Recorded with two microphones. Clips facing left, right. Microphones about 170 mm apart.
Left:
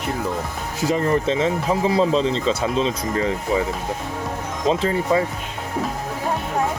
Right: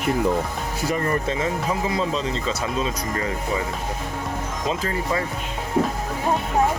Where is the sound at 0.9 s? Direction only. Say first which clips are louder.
Left 5 dB; 25° left (ahead or behind).